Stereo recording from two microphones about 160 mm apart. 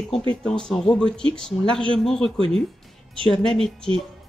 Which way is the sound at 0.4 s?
5° left (ahead or behind).